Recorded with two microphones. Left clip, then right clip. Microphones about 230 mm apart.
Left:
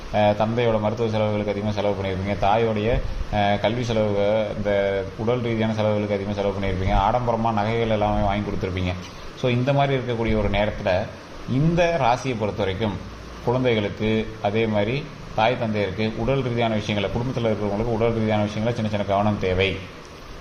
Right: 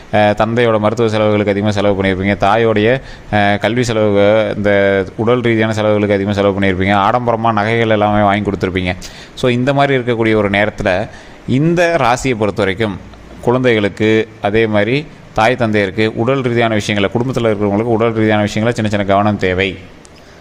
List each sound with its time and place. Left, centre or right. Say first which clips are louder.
0.1 s a man's voice: right 8 dB; right